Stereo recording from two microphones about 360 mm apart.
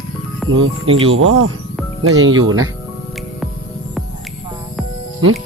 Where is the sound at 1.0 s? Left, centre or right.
Right.